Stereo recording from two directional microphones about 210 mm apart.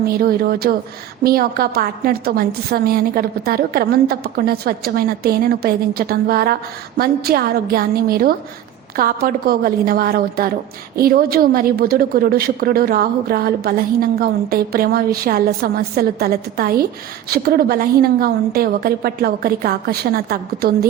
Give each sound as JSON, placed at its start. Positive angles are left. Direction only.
{"t": 0.2, "sound": "a woman's voice", "side_deg": -45}